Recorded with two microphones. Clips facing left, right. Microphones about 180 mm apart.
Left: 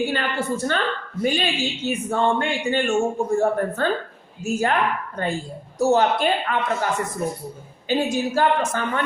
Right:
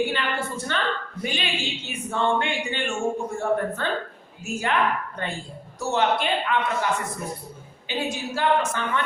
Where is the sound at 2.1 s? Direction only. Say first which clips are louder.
Left 1 dB; 40° left (ahead or behind).